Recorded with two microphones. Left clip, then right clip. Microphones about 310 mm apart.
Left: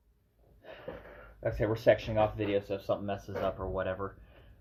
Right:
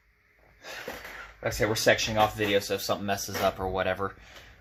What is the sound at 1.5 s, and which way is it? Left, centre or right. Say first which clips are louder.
Speech: right 3 dB; right.